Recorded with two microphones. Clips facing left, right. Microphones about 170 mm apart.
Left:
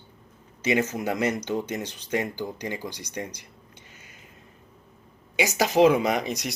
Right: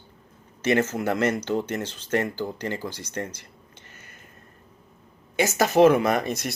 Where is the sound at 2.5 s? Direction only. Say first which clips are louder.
Right 2 dB; 15° left (ahead or behind).